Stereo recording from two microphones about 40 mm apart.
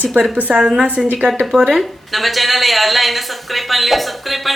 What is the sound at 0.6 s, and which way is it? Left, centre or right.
Speech, centre.